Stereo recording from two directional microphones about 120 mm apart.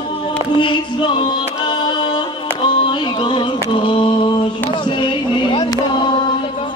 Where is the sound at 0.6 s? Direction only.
45° left (ahead or behind).